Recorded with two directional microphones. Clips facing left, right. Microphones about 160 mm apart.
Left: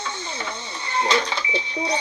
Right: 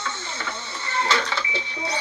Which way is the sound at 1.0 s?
20° left (ahead or behind).